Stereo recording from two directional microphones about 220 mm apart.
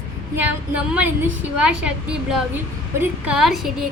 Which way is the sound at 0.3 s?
5° right (ahead or behind).